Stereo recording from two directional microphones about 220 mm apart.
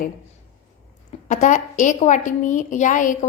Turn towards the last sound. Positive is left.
turn(degrees=35)  # may be behind; listen again after turning